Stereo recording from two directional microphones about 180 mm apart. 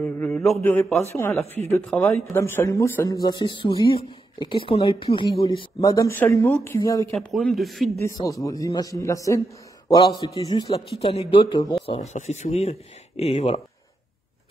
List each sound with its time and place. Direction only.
0.0 s a sound: 5° left (ahead or behind)
0.6 s speech: 10° left (ahead or behind)
7.2 s a man's voice: centre (ahead or behind)
8.0 s speech: 15° left (ahead or behind)
10.7 s speech: 30° left (ahead or behind)